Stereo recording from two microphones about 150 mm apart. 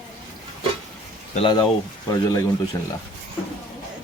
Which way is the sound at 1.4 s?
30° left (ahead or behind).